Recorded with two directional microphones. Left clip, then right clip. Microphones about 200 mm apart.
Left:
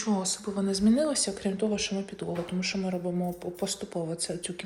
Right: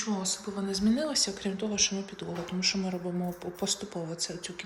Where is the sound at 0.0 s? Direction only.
10° right (ahead or behind).